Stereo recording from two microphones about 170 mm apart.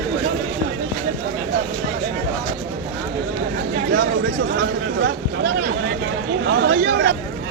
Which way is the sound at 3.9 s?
85° right.